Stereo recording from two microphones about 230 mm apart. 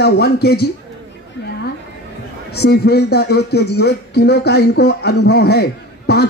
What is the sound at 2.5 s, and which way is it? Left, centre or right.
Speech, left.